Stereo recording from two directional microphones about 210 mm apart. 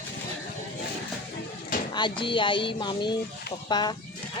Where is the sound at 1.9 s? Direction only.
20° left (ahead or behind).